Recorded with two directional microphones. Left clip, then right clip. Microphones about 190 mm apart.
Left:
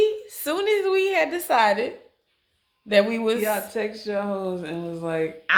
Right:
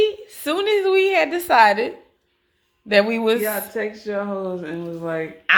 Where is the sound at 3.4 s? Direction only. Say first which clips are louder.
Right 1 dB; 10° left (ahead or behind).